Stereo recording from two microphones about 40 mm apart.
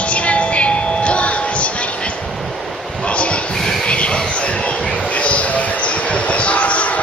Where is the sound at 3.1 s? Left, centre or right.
Left.